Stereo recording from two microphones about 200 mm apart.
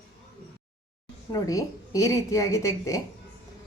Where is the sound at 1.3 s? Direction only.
15° left (ahead or behind).